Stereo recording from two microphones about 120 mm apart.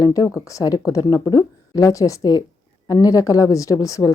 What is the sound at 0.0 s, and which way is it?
A woman's voice, 30° left (ahead or behind).